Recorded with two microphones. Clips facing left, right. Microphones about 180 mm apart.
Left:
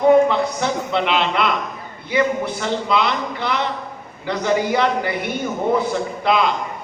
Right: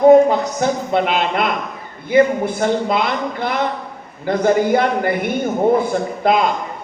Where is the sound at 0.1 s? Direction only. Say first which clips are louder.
Right 4 dB; 45° right (ahead or behind).